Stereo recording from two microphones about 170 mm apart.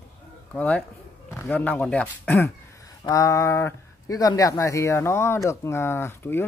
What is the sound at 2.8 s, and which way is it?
Speech, 20° left (ahead or behind).